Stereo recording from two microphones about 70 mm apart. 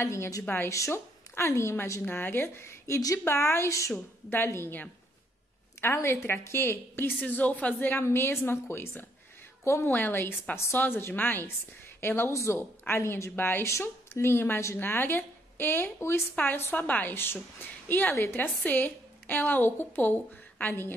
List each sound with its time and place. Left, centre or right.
0.0 s a woman's voice: left
4.3 s a woman's voice: left
7.9 s a woman's voice: left
12.3 s a woman's voice: left
12.5 s a woman's voice: left
13.7 s a woman's voice: left
18.1 s a woman's voice: left
18.4 s a woman's voice: left